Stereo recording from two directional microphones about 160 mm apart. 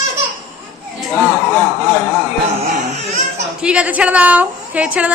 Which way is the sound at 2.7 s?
50° right (ahead or behind).